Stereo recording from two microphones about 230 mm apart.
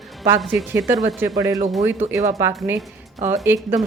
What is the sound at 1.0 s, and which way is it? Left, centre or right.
Speech, centre.